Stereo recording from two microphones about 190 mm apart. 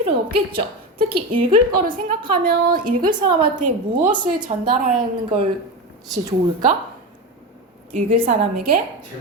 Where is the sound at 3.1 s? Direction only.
25° right (ahead or behind).